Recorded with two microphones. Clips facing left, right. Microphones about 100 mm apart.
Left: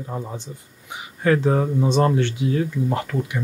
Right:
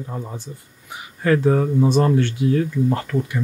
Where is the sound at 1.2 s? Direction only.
20° left (ahead or behind).